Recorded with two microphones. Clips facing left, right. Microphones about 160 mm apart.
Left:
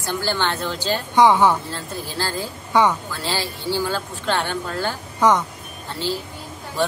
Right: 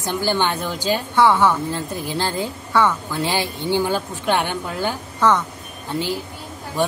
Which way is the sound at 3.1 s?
15° right (ahead or behind).